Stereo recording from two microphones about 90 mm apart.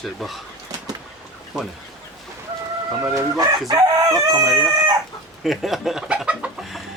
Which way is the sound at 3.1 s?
35° right (ahead or behind).